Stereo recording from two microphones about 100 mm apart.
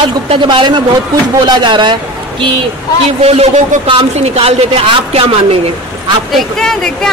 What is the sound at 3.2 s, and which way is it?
A man's voice, 90° right.